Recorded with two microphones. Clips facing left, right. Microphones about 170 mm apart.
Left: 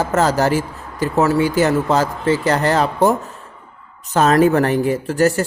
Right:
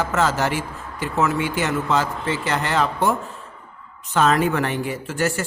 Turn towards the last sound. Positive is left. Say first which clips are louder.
# left 7 dB
turn(degrees=40)  # may be behind; listen again after turning